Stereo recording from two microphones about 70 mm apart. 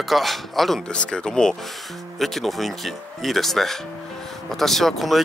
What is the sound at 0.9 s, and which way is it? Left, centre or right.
Speech, centre.